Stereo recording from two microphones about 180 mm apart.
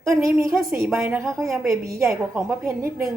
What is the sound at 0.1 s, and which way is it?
A woman's voice, 15° right (ahead or behind).